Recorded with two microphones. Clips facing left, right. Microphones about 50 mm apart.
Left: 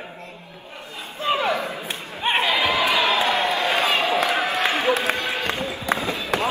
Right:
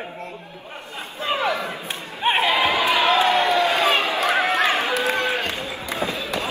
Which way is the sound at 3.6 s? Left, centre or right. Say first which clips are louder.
Right 2 dB; left.